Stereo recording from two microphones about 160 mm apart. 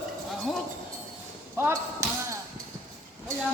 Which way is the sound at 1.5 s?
15° right (ahead or behind).